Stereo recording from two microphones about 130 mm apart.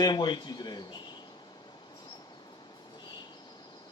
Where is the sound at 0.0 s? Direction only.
35° left (ahead or behind).